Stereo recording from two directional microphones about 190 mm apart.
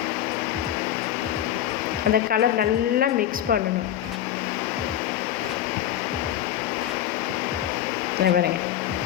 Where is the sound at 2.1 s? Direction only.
50° right (ahead or behind).